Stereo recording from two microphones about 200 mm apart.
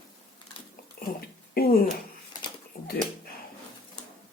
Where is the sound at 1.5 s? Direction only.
50° left (ahead or behind).